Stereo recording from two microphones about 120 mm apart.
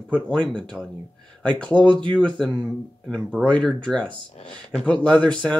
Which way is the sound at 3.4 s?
10° left (ahead or behind).